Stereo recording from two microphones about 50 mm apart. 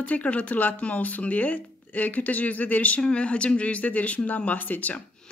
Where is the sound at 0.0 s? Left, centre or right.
Left.